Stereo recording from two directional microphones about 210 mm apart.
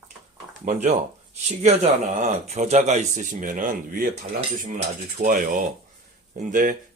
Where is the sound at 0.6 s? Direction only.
35° right (ahead or behind).